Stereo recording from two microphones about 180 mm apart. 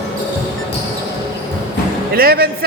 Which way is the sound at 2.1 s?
55° right (ahead or behind).